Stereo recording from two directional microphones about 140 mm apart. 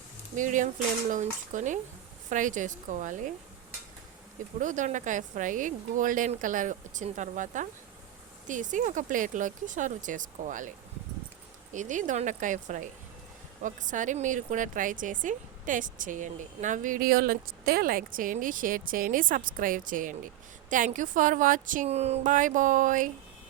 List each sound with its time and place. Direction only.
0.3 s a woman's voice: 65° right (ahead or behind)
4.6 s a woman's voice: 65° right (ahead or behind)
11.7 s a woman's voice: 65° right (ahead or behind)
21.8 s speech: 50° right (ahead or behind); by 23.0 s 70° right (ahead or behind)